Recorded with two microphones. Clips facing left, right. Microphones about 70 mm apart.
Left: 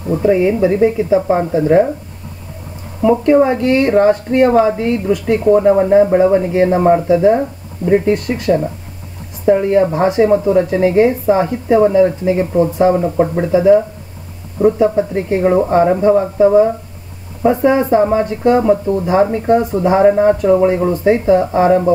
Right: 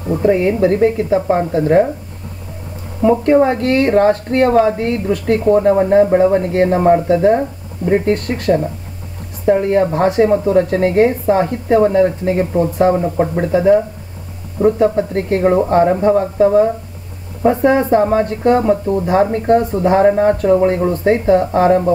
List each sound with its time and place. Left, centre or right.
0.1 s a woman's voice: centre
3.0 s speech: centre
3.3 s a woman's voice: centre
17.6 s speech: centre